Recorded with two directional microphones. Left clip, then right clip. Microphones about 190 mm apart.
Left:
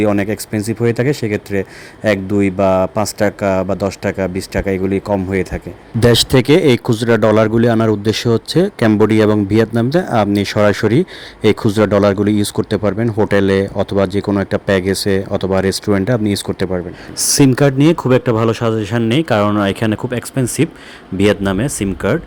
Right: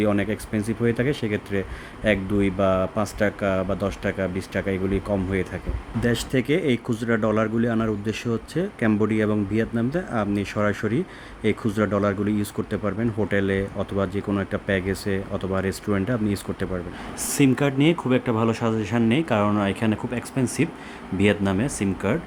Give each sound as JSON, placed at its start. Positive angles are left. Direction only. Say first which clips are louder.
{"t": 0.0, "sound": "speech", "louder": "left 8 dB", "side_deg": 40}